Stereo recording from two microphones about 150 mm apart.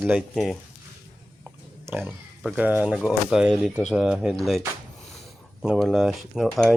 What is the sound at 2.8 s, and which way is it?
Speech, 5° right (ahead or behind).